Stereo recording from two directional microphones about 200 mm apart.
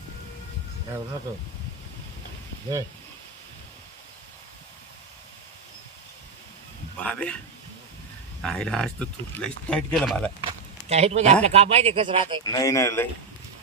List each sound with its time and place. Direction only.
7.0 s speech: 5° left (ahead or behind)
8.4 s speech: 5° left (ahead or behind)
10.4 s speech: 30° right (ahead or behind)
12.5 s speech: 15° left (ahead or behind)